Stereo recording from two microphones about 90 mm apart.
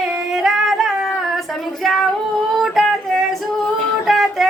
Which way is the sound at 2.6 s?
Centre (ahead or behind).